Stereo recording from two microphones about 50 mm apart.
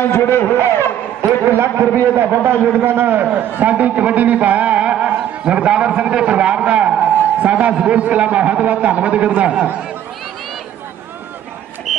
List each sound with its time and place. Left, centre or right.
0.0 s a sound: left
1.6 s a man's voice: right
7.7 s a man's voice: centre
8.0 s a man's voice: right